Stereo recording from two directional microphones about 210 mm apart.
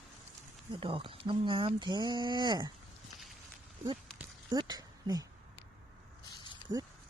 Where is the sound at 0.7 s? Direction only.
25° right (ahead or behind).